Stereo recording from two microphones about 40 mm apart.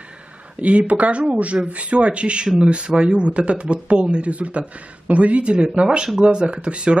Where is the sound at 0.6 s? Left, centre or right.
Right.